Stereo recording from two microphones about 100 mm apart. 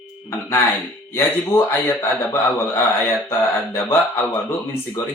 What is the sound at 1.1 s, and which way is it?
Speech, 25° left (ahead or behind).